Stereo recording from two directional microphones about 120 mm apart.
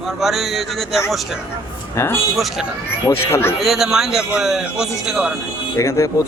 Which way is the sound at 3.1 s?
20° left (ahead or behind).